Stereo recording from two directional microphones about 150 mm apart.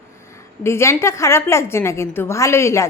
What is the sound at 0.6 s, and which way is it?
A woman's voice, 15° left (ahead or behind).